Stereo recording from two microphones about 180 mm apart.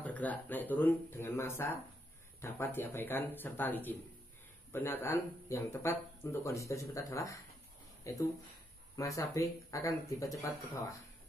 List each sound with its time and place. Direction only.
0.0 s speech: 10° left (ahead or behind)